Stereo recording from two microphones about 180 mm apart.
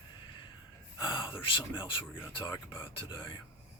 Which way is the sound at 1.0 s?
25° left (ahead or behind).